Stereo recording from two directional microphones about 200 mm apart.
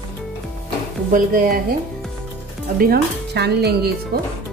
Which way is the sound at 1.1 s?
45° right (ahead or behind).